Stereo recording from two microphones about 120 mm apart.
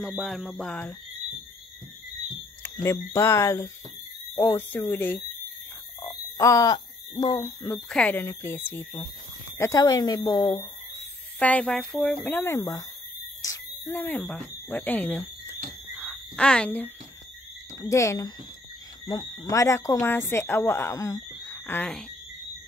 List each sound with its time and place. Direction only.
0.2 s a sound: centre (ahead or behind)
2.6 s speech: 20° left (ahead or behind)
7.9 s speech: 10° left (ahead or behind)
8.2 s speech: 20° left (ahead or behind)
9.6 s speech: 30° left (ahead or behind)
11.3 s speech: 10° left (ahead or behind)
12.3 s speech: 20° left (ahead or behind)
13.4 s a sound: 30° left (ahead or behind)
13.9 s speech: 15° left (ahead or behind)
16.0 s a sound: 5° left (ahead or behind)
17.7 s speech: 25° left (ahead or behind)
21.5 s a sound: 20° left (ahead or behind)